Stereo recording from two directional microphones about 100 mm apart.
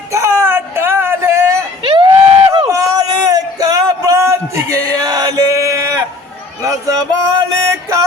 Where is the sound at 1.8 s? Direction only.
60° right (ahead or behind).